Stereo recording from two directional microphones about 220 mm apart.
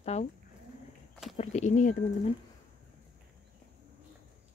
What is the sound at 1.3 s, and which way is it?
Speech, 30° left (ahead or behind).